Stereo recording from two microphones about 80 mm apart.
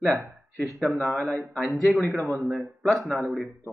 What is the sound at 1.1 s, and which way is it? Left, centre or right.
Speech, centre.